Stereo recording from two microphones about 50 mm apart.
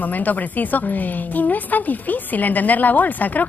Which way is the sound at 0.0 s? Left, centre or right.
Left.